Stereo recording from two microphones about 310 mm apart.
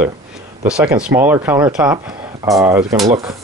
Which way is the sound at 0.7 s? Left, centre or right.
Centre.